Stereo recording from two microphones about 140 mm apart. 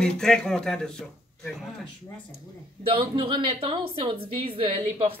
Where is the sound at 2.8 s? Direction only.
40° right (ahead or behind).